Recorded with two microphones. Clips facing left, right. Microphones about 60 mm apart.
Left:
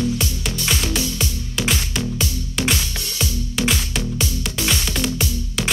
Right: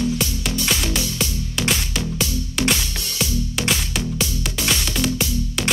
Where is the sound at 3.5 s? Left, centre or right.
Centre.